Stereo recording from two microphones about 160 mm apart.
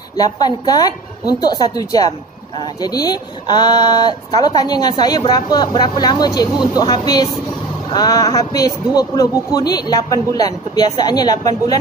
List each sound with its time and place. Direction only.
0.2 s a man's voice: 25° left (ahead or behind)